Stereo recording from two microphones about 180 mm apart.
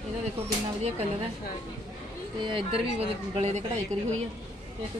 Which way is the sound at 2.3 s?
25° right (ahead or behind).